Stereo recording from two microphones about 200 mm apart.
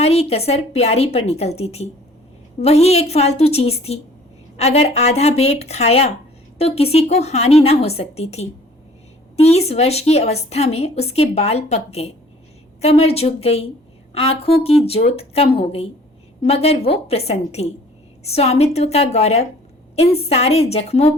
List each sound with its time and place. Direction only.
0.0 s a woman's voice: 30° left (ahead or behind)